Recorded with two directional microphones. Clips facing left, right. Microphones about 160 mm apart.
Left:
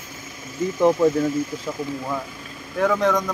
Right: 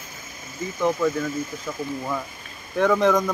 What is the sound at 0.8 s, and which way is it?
Speech, 30° left (ahead or behind).